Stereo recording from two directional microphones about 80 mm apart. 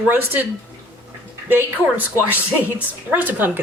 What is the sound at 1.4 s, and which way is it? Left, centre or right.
Speech, right.